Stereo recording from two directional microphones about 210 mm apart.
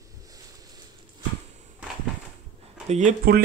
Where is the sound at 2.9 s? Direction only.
35° right (ahead or behind).